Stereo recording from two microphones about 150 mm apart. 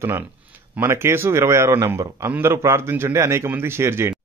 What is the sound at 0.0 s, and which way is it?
Speech, 15° right (ahead or behind).